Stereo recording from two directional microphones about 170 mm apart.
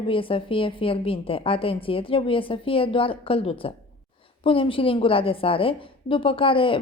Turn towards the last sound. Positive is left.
turn(degrees=30)  # may be behind; listen again after turning